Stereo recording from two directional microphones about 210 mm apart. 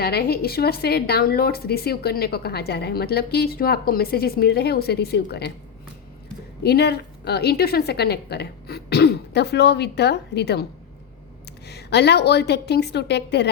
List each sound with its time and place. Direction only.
0.0 s speech: 50° left (ahead or behind)
6.6 s speech: 50° left (ahead or behind)
11.7 s speech: 50° left (ahead or behind)